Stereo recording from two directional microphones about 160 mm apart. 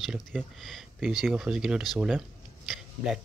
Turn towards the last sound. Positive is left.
turn(degrees=0)  # may be behind; listen again after turning